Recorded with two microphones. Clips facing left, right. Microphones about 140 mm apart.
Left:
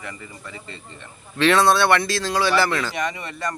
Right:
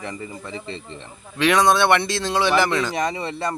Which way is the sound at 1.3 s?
15° right (ahead or behind).